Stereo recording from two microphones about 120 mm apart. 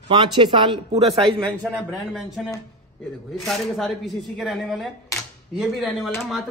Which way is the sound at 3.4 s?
Centre (ahead or behind).